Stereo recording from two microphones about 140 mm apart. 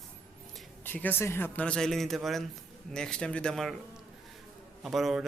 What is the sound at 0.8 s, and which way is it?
Speech, 15° left (ahead or behind).